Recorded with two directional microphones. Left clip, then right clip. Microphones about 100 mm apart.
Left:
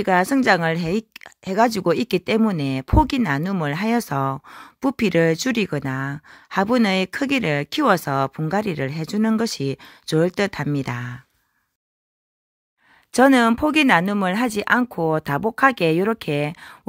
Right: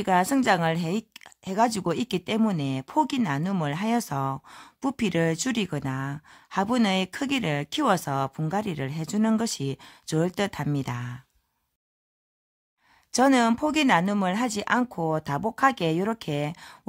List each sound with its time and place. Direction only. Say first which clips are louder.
0.0 s a woman's voice: left 5 dB; 30° left (ahead or behind)
13.1 s a woman's voice: left 6 dB; 40° left (ahead or behind)